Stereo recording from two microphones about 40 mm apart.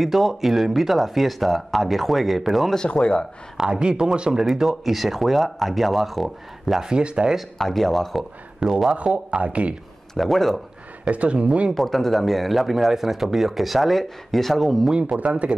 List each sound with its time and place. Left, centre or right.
0.0 s speech: centre
2.9 s speech: left
3.5 s speech: right
4.5 s speech: centre
6.9 s speech: right
7.5 s speech: centre
8.2 s speech: centre
8.9 s speech: right
10.1 s speech: centre
11.1 s speech: right
11.7 s speech: centre
15.1 s speech: right